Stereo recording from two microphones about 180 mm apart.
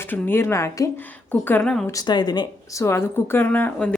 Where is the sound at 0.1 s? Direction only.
10° left (ahead or behind).